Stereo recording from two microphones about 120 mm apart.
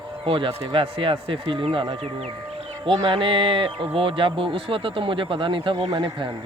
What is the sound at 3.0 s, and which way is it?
Speech, 45° right (ahead or behind).